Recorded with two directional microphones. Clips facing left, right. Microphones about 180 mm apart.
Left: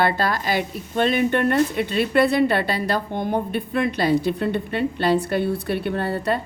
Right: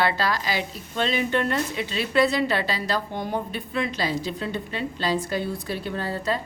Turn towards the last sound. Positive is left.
turn(degrees=60)  # may be behind; listen again after turning